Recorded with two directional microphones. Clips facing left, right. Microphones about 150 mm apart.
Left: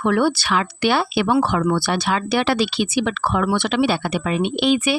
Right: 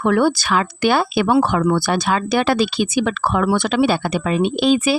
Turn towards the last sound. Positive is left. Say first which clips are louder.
# right 2 dB
turn(degrees=-35)  # may be behind; listen again after turning